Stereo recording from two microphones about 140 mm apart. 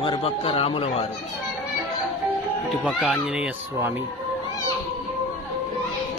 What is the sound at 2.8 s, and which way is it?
A child's voice, centre (ahead or behind).